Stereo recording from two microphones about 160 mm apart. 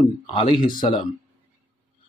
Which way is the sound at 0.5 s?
60° left (ahead or behind).